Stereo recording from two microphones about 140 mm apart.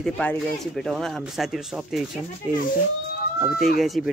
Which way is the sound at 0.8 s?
Centre (ahead or behind).